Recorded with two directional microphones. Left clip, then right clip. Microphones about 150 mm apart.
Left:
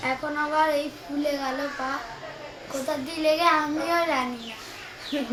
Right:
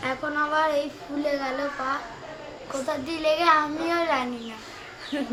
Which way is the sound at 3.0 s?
15° right (ahead or behind).